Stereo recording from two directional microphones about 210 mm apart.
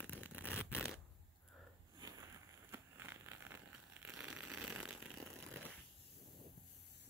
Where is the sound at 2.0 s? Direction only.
20° right (ahead or behind).